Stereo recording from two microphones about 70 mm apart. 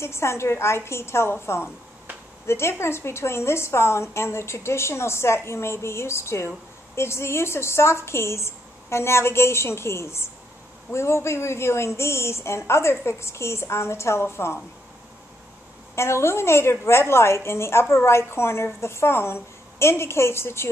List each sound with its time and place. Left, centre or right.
0.0 s a woman's voice: left
15.9 s a woman's voice: left